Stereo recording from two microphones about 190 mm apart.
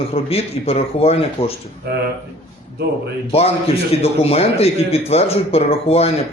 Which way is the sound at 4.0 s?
35° left (ahead or behind).